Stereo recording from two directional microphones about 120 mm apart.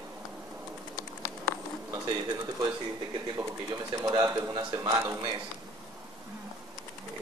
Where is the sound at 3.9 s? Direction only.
35° right (ahead or behind).